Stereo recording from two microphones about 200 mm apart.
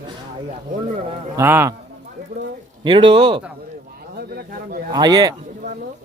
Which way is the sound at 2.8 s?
25° right (ahead or behind).